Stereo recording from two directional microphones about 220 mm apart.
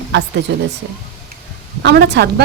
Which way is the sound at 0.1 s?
55° right (ahead or behind).